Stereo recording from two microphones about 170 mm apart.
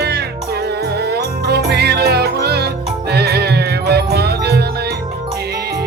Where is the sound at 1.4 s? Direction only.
75° right (ahead or behind).